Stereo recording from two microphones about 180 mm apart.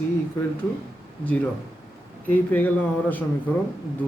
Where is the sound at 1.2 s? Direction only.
10° left (ahead or behind).